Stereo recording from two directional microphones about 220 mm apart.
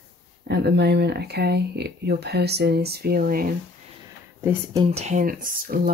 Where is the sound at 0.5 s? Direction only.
50° right (ahead or behind).